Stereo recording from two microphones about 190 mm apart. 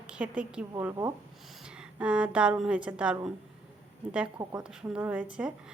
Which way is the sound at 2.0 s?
5° right (ahead or behind).